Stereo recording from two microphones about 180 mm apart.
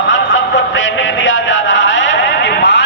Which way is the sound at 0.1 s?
90° left.